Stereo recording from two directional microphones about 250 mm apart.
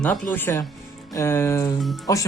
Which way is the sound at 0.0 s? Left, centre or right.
Centre.